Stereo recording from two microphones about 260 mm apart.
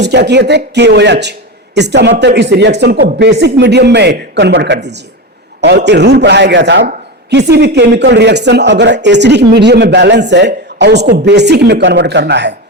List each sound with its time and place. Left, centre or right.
0.0 s a man's voice: right